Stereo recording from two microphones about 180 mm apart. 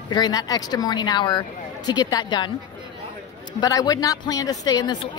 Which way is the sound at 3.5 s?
20° left (ahead or behind).